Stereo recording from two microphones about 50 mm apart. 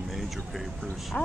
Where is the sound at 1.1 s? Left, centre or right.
Left.